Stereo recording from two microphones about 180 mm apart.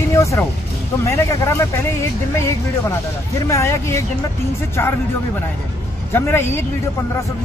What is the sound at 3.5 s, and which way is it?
Speech, 15° left (ahead or behind).